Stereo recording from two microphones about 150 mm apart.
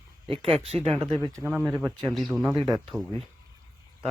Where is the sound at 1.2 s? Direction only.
20° right (ahead or behind).